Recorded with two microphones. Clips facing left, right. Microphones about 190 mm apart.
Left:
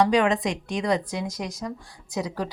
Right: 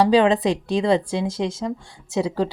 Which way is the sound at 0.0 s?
30° right (ahead or behind).